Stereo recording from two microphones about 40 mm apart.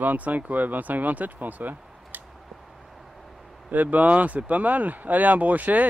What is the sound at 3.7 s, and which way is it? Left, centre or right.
Speech, right.